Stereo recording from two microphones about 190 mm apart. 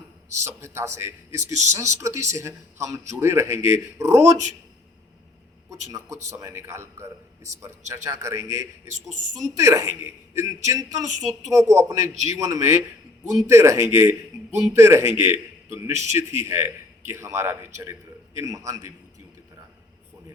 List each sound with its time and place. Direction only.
0.4 s a man's voice: 15° right (ahead or behind)
6.4 s a man's voice: 15° right (ahead or behind)
15.1 s a man's voice: 25° left (ahead or behind)
15.7 s a man's voice: 15° right (ahead or behind)